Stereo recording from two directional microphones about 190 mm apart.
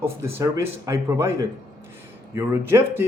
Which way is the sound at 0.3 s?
15° right (ahead or behind).